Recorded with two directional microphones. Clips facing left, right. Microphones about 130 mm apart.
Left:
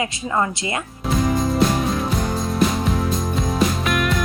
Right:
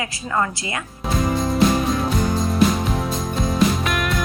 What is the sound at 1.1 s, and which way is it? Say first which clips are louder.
Music: left 1 dB; centre (ahead or behind).